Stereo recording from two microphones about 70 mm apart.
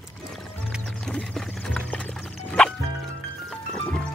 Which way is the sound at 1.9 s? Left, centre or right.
Centre.